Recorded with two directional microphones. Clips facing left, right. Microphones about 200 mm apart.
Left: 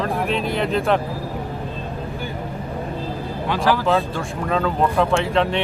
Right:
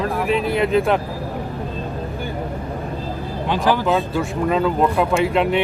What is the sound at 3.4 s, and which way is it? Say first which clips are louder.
Speech: right 1 dB; 15° right (ahead or behind).